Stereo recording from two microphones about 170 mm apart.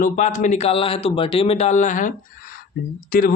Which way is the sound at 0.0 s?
50° left (ahead or behind).